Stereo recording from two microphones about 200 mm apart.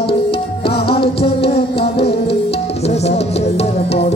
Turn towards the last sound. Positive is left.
turn(degrees=30)  # may be behind; listen again after turning